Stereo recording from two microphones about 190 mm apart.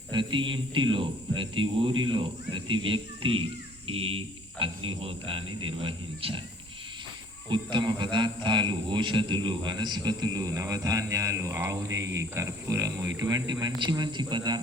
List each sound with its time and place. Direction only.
0.1 s a man's voice: 25° right (ahead or behind)
7.5 s a man's voice: 25° right (ahead or behind)